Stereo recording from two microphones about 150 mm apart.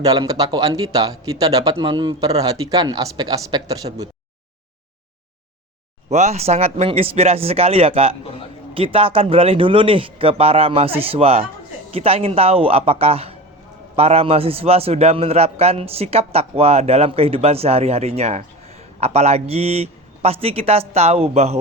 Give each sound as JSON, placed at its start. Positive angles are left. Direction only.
{"t": 0.0, "sound": "speech", "side_deg": -25}
{"t": 6.1, "sound": "a man's voice", "side_deg": -45}